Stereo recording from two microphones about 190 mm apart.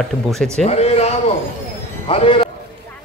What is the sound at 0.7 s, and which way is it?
A man's voice, 35° left (ahead or behind).